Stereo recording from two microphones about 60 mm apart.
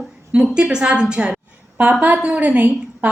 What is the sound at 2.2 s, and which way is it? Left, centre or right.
Speech, right.